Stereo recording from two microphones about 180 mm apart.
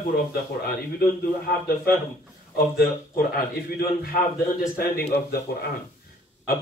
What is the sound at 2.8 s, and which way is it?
Speech, 55° left (ahead or behind).